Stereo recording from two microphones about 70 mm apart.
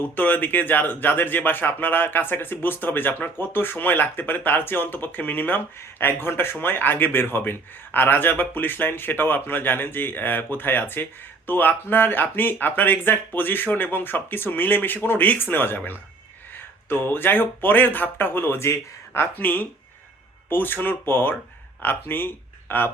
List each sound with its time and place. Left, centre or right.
0.0 s speech: left
19.4 s speech: left